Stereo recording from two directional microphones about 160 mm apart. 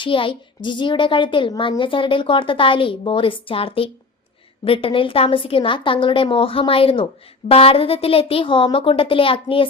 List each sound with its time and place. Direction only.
0.0 s a woman's voice: 35° left (ahead or behind)